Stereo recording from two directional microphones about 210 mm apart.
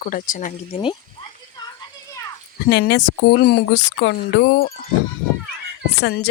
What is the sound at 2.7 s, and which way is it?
Speech, 55° left (ahead or behind).